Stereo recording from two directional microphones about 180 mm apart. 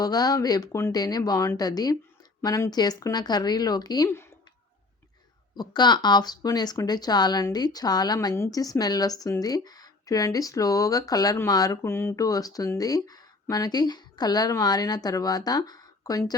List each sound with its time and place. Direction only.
0.0 s speech: 20° left (ahead or behind)
5.5 s speech: 25° left (ahead or behind)